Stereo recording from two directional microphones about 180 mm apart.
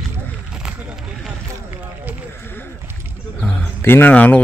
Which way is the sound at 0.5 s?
5° right (ahead or behind).